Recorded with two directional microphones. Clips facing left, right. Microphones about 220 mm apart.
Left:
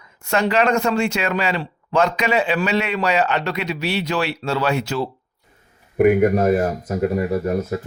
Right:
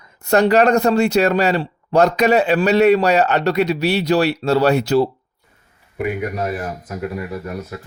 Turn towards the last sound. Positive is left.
turn(degrees=40)  # may be behind; listen again after turning